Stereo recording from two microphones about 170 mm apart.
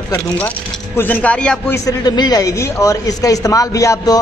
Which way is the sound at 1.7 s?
20° left (ahead or behind).